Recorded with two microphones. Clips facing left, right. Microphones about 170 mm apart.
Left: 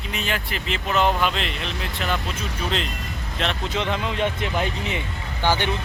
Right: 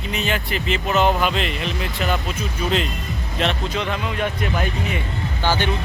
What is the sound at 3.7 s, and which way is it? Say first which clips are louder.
Speech: even; 20° left (ahead or behind).